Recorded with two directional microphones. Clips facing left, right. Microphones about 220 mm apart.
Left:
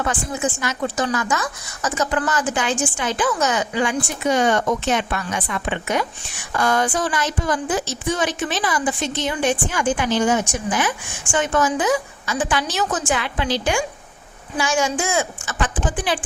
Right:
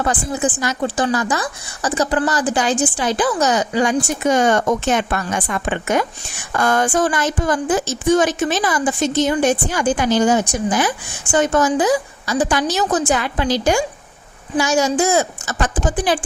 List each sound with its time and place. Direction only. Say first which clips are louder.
0.0 s speech: right 3 dB; 35° right (ahead or behind)